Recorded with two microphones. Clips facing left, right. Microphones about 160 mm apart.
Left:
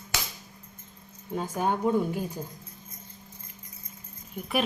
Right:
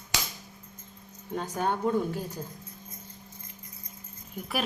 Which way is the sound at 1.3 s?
10° left (ahead or behind).